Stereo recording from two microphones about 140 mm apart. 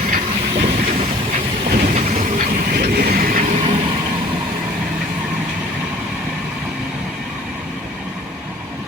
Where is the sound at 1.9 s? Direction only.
65° right (ahead or behind).